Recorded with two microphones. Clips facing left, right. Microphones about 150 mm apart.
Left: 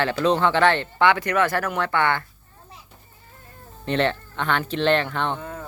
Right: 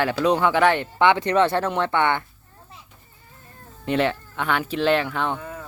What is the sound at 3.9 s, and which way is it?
Speech, 10° right (ahead or behind).